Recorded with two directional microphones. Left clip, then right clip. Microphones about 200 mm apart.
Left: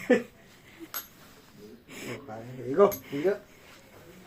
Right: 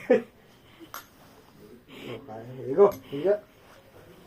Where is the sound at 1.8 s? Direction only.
30° left (ahead or behind).